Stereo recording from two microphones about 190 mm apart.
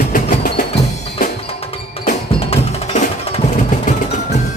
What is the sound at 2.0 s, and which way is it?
Music, 40° left (ahead or behind).